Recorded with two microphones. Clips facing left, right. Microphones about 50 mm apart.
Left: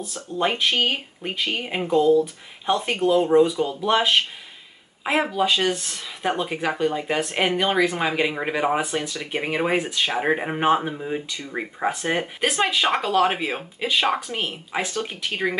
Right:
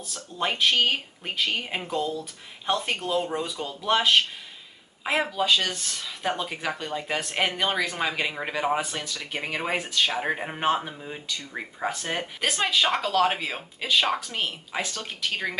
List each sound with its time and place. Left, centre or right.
0.4 s speech: centre